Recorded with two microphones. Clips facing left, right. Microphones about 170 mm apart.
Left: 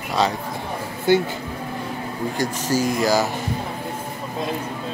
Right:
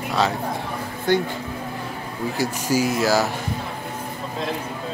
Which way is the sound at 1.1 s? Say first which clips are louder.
Left 3 dB; 5° left (ahead or behind).